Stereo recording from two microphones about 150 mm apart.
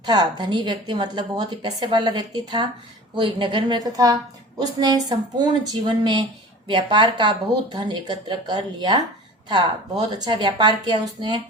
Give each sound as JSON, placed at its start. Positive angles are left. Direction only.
{"t": 0.0, "sound": "a woman's voice", "side_deg": -30}